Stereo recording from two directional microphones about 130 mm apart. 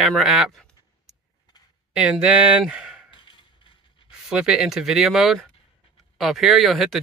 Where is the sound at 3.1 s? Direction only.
40° left (ahead or behind).